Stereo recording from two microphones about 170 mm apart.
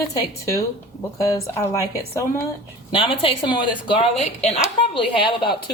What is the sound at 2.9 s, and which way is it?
Speech, 30° left (ahead or behind).